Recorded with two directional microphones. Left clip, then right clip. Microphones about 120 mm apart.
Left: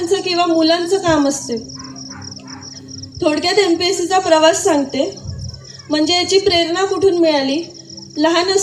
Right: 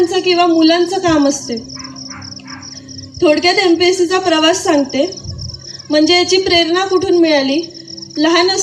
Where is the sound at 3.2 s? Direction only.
35° left (ahead or behind).